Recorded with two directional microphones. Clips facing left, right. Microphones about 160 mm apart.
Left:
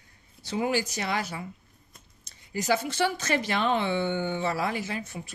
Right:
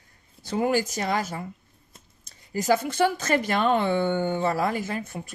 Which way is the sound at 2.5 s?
45° right (ahead or behind).